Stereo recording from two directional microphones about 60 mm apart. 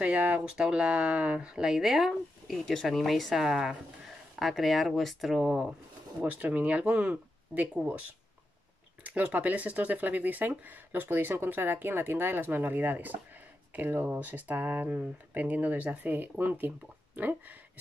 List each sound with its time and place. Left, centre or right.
0.0 s speech: right; by 2.6 s centre
2.6 s speech: centre
6.2 s speech: right
9.0 s speech: right